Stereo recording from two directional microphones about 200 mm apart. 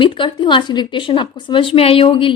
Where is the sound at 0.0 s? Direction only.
25° left (ahead or behind).